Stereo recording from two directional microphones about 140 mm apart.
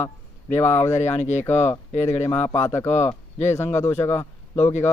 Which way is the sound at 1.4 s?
15° left (ahead or behind).